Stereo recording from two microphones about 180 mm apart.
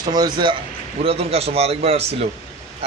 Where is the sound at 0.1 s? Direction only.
25° right (ahead or behind).